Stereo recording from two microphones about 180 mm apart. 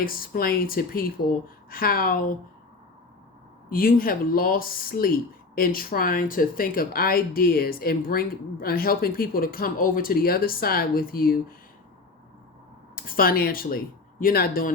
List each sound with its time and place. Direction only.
0.0 s speech: 55° left (ahead or behind)
3.7 s speech: 50° left (ahead or behind)
13.0 s speech: 55° left (ahead or behind)